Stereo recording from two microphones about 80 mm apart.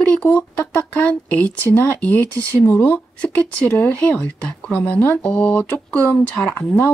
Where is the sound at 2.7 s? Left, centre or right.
Left.